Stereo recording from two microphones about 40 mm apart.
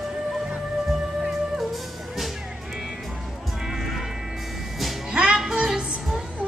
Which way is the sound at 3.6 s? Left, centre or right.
Centre.